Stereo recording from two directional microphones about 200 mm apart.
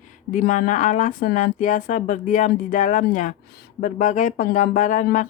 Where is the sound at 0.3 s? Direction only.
40° left (ahead or behind).